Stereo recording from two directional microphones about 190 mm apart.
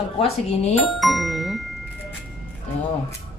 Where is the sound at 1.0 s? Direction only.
Centre (ahead or behind).